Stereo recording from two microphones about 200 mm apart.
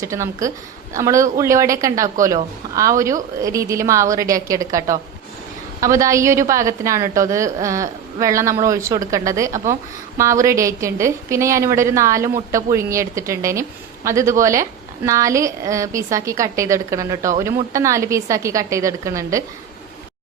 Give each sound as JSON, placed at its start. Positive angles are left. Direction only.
{"t": 0.0, "sound": "a woman's voice", "side_deg": -15}